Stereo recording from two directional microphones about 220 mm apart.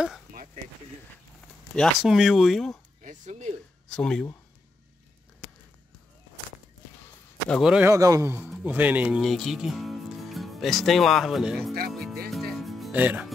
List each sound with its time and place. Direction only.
1.8 s speech: centre (ahead or behind)
3.0 s a sound: 35° right (ahead or behind)
3.9 s speech: 5° left (ahead or behind)
7.4 s a man's voice: centre (ahead or behind)
11.9 s music: centre (ahead or behind)